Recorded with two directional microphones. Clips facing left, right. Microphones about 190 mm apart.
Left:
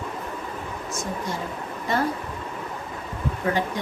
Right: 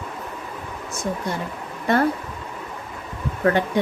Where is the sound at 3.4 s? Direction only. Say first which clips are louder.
Right 6 dB; 65° right (ahead or behind).